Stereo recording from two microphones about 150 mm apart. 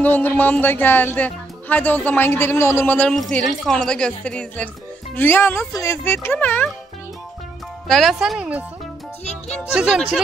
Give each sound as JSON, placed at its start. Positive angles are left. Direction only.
{"t": 0.0, "sound": "a woman's voice", "side_deg": 10}
{"t": 7.9, "sound": "a woman's voice", "side_deg": 0}